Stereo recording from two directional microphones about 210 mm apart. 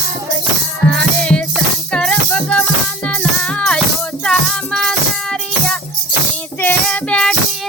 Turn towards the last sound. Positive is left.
turn(degrees=5)  # may be behind; listen again after turning